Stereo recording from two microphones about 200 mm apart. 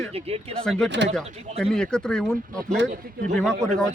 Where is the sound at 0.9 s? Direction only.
60° right (ahead or behind).